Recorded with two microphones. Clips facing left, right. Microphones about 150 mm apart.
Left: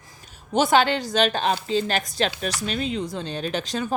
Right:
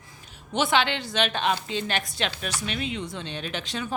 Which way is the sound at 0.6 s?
40° left (ahead or behind).